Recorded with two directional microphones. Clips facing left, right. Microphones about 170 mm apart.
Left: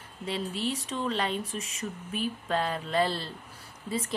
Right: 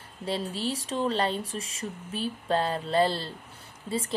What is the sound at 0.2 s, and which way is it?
Speech, 35° right (ahead or behind).